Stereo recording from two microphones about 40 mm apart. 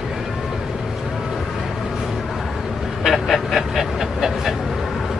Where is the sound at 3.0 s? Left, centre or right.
Centre.